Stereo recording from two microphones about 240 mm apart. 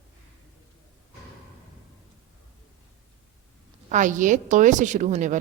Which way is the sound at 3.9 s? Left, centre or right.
Right.